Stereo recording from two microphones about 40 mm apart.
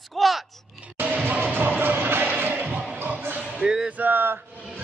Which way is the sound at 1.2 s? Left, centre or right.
Right.